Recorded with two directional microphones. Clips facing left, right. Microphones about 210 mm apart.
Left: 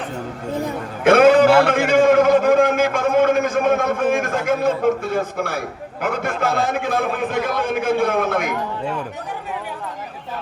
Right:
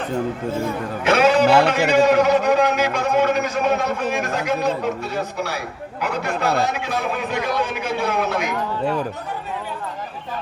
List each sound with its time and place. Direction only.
1.0 s a man's voice: 50° left (ahead or behind)